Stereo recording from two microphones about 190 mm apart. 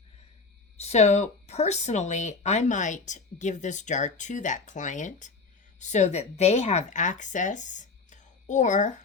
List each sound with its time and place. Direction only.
0.8 s speech: 35° left (ahead or behind)